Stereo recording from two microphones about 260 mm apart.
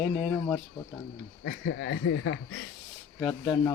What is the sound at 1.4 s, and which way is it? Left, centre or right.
Speech, left.